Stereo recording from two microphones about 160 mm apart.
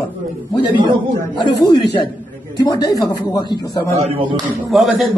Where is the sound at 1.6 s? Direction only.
25° left (ahead or behind).